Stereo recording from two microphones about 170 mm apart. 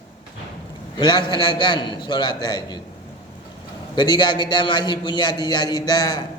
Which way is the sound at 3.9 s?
25° left (ahead or behind).